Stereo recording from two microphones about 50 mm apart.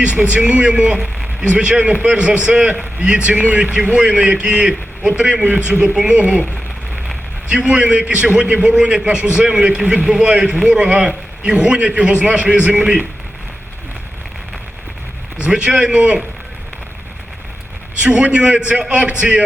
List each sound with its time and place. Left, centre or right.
0.0 s a man's voice: right
7.5 s a man's voice: centre
15.4 s a man's voice: right
18.0 s a man's voice: right